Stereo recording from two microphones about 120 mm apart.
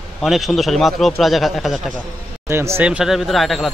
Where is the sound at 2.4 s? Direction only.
25° right (ahead or behind).